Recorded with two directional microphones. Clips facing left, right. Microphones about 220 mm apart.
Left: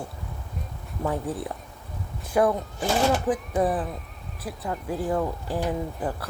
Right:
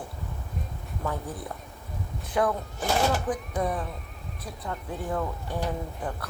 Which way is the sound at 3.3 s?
30° left (ahead or behind).